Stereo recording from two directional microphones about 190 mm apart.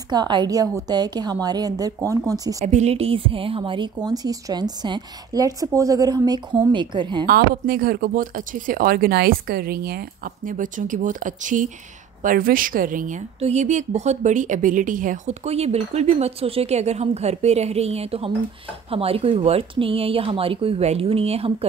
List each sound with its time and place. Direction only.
0.1 s a woman's voice: 25° right (ahead or behind)
2.6 s a woman's voice: 35° right (ahead or behind)
7.2 s a woman's voice: 55° right (ahead or behind); by 21.6 s 30° right (ahead or behind)